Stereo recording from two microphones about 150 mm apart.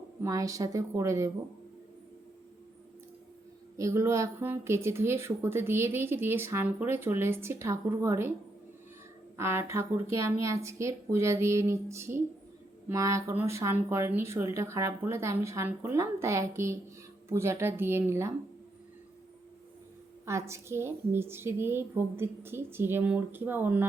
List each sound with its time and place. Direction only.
0.2 s speech: 20° right (ahead or behind)
3.8 s speech: 20° right (ahead or behind)
9.4 s speech: 15° right (ahead or behind)
20.2 s speech: 20° right (ahead or behind)